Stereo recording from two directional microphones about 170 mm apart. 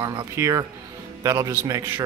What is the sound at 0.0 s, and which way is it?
A man's voice, 20° right (ahead or behind).